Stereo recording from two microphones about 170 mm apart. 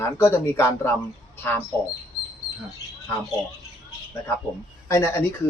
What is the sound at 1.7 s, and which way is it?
Speech, 25° right (ahead or behind).